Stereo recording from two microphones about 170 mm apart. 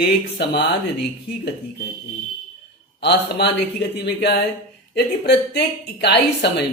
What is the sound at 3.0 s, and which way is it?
A man's voice, 85° left.